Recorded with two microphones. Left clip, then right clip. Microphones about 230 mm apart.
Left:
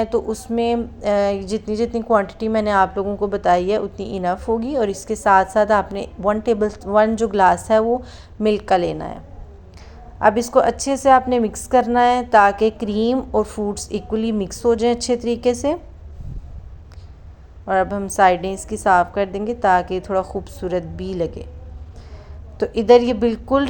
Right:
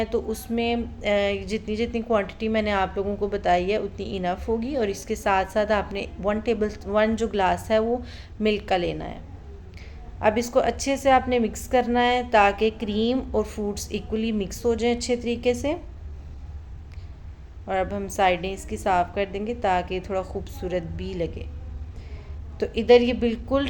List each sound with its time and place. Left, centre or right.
0.0 s speech: centre
10.2 s a woman's voice: centre
17.7 s a woman's voice: centre
22.5 s a woman's voice: centre